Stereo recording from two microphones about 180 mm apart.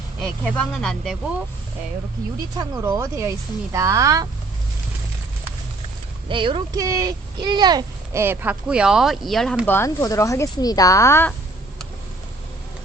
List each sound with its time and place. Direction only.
0.2 s speech: 5° left (ahead or behind)
2.6 s speech: 20° right (ahead or behind)
6.2 s speech: 30° right (ahead or behind); by 11.3 s 10° left (ahead or behind)